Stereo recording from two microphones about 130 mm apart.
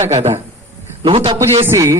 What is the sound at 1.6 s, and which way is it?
Speech, 20° right (ahead or behind).